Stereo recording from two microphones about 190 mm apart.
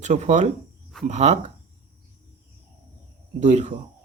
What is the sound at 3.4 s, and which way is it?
Speech, 35° right (ahead or behind).